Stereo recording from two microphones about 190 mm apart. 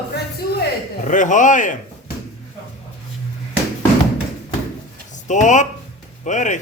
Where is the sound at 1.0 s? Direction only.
40° left (ahead or behind).